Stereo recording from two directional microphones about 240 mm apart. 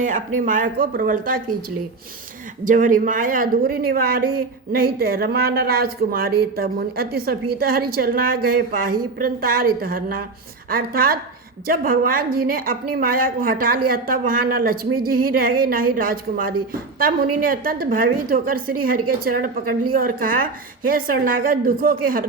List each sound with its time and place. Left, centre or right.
0.0 s a woman's voice: right
2.6 s a woman's voice: right